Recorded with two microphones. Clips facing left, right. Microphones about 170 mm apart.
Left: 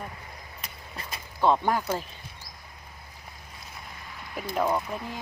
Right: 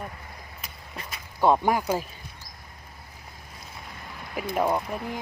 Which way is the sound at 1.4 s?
10° right (ahead or behind).